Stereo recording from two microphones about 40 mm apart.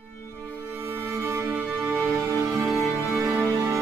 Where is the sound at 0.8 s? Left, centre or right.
Right.